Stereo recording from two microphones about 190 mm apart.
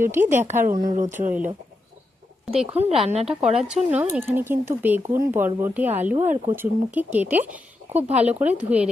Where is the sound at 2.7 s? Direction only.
35° right (ahead or behind).